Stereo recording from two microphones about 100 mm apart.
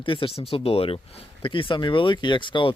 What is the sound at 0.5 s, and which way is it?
Speech, 75° left (ahead or behind).